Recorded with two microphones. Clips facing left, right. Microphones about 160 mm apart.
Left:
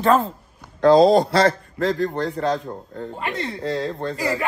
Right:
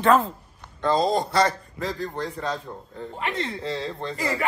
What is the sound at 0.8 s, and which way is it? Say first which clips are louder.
A man's voice: left 9 dB; 90° left.